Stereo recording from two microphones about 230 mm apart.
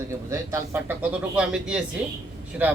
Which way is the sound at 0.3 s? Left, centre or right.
Centre.